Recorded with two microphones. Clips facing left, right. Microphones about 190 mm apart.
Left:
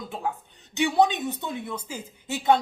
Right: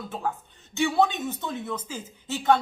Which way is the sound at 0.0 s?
15° left (ahead or behind).